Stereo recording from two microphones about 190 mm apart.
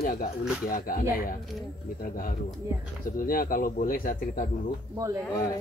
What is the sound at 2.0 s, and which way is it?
Speech, 50° left (ahead or behind).